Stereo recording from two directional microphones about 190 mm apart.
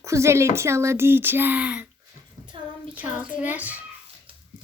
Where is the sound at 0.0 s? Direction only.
15° right (ahead or behind).